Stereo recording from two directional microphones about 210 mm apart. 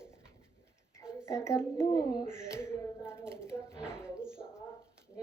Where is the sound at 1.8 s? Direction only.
20° left (ahead or behind).